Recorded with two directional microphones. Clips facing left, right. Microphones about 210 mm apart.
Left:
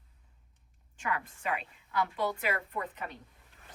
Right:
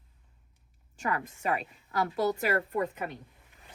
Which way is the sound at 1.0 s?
40° right (ahead or behind).